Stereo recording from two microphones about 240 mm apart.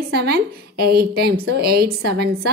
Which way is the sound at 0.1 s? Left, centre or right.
Right.